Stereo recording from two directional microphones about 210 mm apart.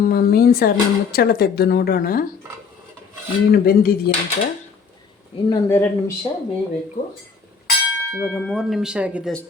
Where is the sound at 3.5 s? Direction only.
45° left (ahead or behind).